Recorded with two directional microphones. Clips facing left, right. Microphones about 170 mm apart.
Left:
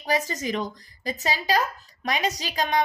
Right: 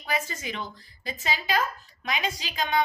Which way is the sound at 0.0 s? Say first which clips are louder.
Left 5 dB; 35° left (ahead or behind).